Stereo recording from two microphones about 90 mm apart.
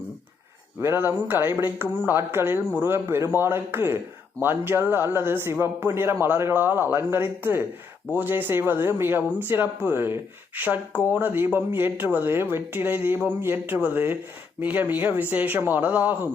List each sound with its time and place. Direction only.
0.8 s speech: 25° right (ahead or behind)